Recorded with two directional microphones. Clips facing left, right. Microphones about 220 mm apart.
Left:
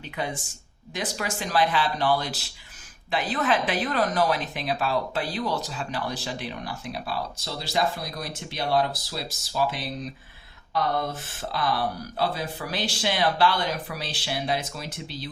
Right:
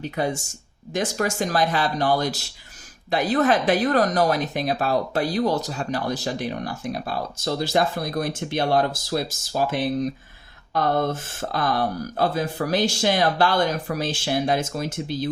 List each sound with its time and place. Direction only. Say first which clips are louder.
0.0 s speech: right 6 dB; 40° right (ahead or behind)